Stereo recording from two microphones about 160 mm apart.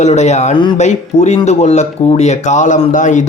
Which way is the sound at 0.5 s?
30° left (ahead or behind).